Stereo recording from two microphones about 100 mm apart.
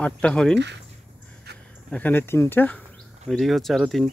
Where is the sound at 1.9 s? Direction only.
15° left (ahead or behind).